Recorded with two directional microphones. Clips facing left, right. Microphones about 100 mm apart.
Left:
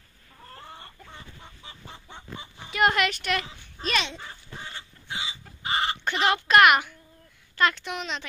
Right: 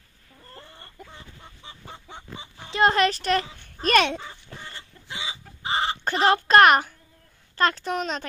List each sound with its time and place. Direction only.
2.7 s a sound: 30° right (ahead or behind); by 4.2 s 55° right (ahead or behind)
5.6 s chicken: 30° right (ahead or behind)
7.5 s a child's voice: 35° right (ahead or behind)